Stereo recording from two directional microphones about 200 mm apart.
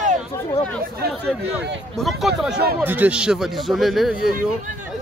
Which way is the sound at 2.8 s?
10° right (ahead or behind).